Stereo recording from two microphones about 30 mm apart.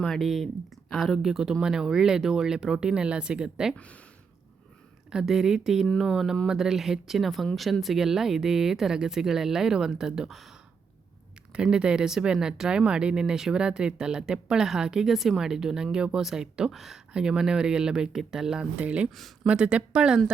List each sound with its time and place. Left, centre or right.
0.2 s speech: centre
1.2 s speech: centre
2.2 s speech: centre
2.7 s speech: right
5.3 s speech: centre
6.0 s speech: centre
6.5 s speech: centre
10.2 s speech: centre
11.5 s speech: right
15.0 s speech: centre
15.4 s speech: centre
16.7 s speech: centre
17.2 s speech: right
18.8 s speech: right